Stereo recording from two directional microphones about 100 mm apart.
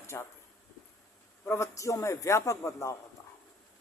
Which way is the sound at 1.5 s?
30° left (ahead or behind).